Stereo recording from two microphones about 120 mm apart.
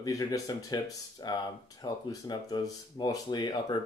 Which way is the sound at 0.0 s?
30° left (ahead or behind).